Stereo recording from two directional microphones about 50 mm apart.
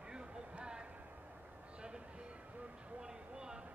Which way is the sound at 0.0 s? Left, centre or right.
Centre.